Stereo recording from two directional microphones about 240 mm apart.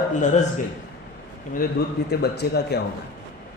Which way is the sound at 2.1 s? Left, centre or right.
Left.